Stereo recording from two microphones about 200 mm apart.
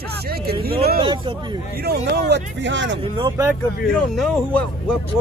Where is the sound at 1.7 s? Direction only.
55° right (ahead or behind).